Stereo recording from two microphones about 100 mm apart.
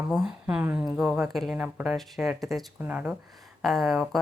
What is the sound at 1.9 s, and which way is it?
Speech, centre (ahead or behind).